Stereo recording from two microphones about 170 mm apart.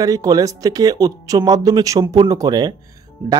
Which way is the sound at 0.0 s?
20° right (ahead or behind).